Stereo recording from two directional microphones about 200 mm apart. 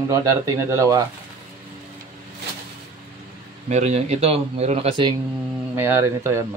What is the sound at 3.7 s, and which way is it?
Speech, 35° right (ahead or behind).